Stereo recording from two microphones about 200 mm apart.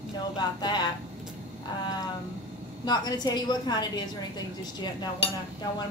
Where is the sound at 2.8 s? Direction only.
20° left (ahead or behind).